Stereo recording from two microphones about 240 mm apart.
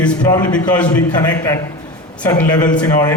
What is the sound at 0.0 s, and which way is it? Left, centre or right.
A man's voice, centre.